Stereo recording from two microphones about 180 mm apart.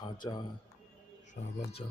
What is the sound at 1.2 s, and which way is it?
Speech, 40° left (ahead or behind).